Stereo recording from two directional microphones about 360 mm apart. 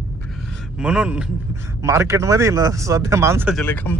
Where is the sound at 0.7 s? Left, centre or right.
Centre.